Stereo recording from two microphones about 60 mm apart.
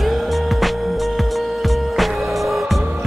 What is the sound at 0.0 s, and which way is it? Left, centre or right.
Music, centre.